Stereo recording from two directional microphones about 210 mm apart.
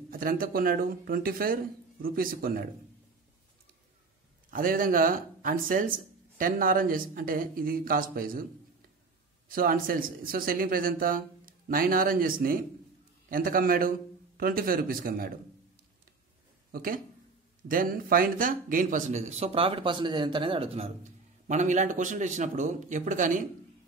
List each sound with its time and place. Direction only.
0.1 s speech: 40° right (ahead or behind)
4.5 s a man's voice: 40° right (ahead or behind)
9.5 s speech: 40° right (ahead or behind)
16.7 s a man's voice: 45° right (ahead or behind)